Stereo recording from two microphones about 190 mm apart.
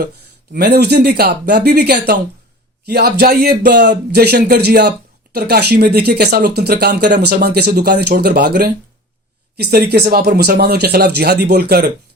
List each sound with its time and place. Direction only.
0.5 s speech: 60° right (ahead or behind)